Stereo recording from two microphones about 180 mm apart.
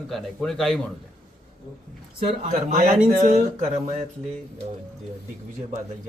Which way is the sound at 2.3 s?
40° right (ahead or behind).